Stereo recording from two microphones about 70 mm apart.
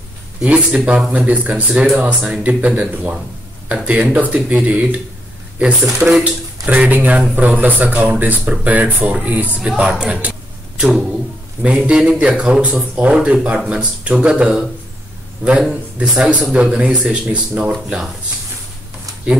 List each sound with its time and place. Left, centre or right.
0.4 s speech: centre
1.5 s speech: centre
2.0 s speech: centre
6.0 s speech: centre
9.6 s speech: centre
11.6 s speech: centre